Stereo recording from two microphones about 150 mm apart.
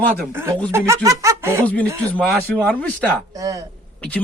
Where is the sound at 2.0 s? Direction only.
10° left (ahead or behind).